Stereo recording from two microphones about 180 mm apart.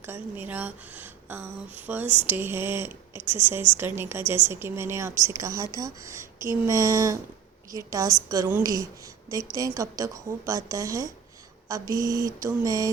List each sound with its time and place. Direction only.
0.0 s a woman's voice: 10° right (ahead or behind)